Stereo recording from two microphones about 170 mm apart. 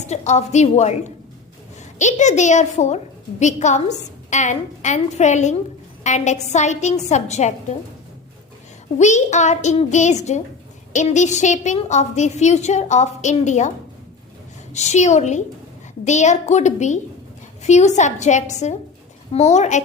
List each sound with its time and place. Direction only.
0.0 s a woman's voice: 40° left (ahead or behind)
9.0 s a woman's voice: 45° left (ahead or behind)